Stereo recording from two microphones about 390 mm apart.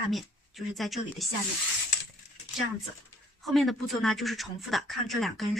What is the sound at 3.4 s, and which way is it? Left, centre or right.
Speech, centre.